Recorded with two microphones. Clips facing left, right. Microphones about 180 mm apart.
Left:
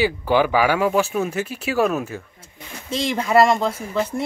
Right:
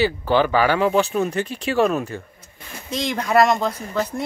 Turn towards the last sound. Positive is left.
turn(degrees=5)  # may be behind; listen again after turning